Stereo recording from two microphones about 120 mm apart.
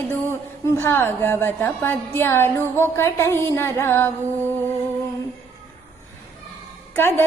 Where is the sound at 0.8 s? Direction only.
15° left (ahead or behind).